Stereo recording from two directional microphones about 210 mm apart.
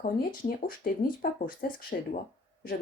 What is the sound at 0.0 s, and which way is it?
A woman's voice, 40° left (ahead or behind).